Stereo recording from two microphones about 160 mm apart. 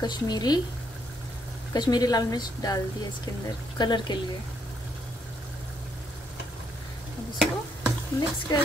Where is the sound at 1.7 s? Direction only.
25° left (ahead or behind).